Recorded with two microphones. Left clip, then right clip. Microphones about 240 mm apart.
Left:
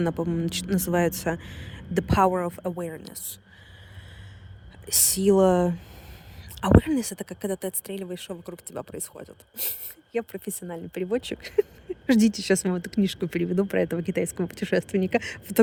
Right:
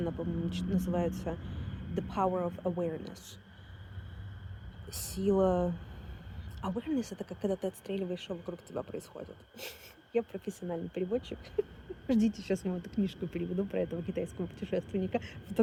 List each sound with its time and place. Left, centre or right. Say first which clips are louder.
0.0 s speech: left 9 dB; left
4.9 s speech: left 10 dB; left